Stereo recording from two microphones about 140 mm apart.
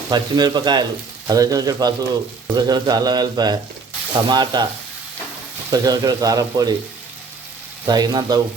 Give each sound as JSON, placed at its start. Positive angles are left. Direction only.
{"t": 0.1, "sound": "speech", "side_deg": -30}
{"t": 5.7, "sound": "speech", "side_deg": -25}
{"t": 7.9, "sound": "speech", "side_deg": -30}